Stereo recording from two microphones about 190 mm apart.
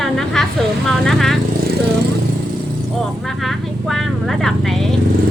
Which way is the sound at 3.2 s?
Centre (ahead or behind).